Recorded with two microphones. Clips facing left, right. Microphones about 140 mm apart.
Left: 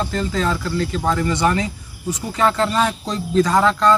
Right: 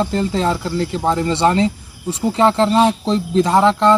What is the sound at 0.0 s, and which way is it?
Speech, 25° right (ahead or behind).